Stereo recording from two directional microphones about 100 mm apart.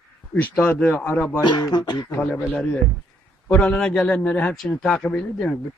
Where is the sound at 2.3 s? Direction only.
15° left (ahead or behind).